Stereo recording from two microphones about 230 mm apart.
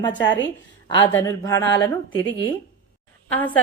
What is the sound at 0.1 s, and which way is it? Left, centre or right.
Speech, left.